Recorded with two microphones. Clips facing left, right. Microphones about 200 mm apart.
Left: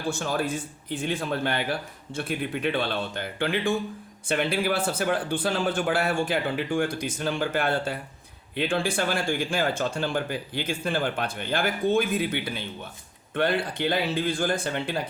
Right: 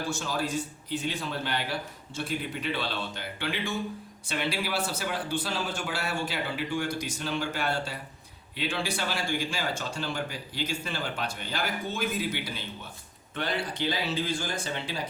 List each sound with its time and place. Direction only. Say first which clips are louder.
0.1 s speech: left 6 dB; 55° left (ahead or behind)